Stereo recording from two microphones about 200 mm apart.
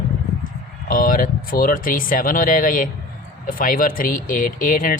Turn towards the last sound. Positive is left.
turn(degrees=40)  # may be behind; listen again after turning